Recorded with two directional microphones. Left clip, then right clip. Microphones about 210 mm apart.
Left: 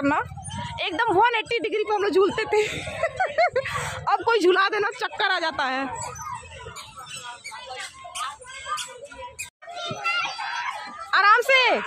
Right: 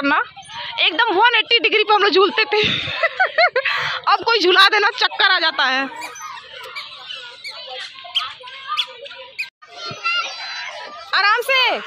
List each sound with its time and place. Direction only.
0.0 s a woman's voice: centre (ahead or behind)
10.0 s a sound: 40° left (ahead or behind)
11.1 s a woman's voice: 5° left (ahead or behind)